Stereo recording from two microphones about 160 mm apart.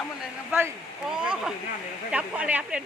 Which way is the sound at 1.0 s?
5° right (ahead or behind).